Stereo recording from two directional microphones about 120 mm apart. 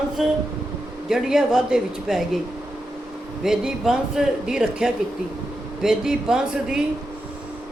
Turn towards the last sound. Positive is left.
turn(degrees=-5)  # may be behind; listen again after turning